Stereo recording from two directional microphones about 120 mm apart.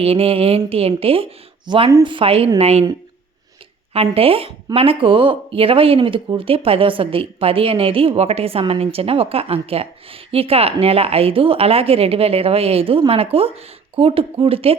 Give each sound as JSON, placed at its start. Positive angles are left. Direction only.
{"t": 0.0, "sound": "speech", "side_deg": -55}
{"t": 3.9, "sound": "speech", "side_deg": -55}